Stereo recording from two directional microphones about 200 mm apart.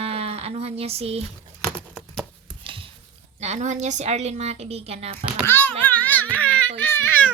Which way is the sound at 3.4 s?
35° right (ahead or behind).